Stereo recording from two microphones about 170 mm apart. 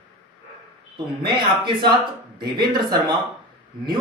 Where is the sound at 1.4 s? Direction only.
30° right (ahead or behind).